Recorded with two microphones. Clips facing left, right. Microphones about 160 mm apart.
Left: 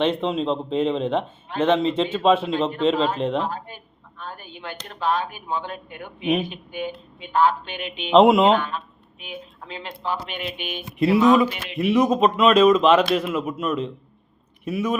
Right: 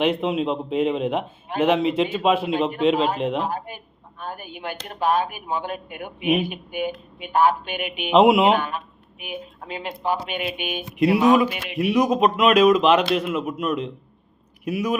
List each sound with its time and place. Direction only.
0.0 s a man's voice: 5° right (ahead or behind)
11.3 s a man's voice: 5° right (ahead or behind)